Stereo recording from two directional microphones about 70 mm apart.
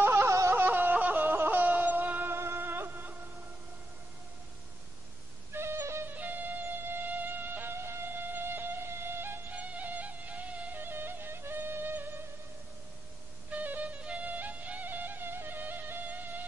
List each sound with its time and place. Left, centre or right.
0.0 s a sound: right
0.6 s a sound: right
5.5 s wheeze: right
6.1 s music: right
9.6 s music: right
13.5 s music: right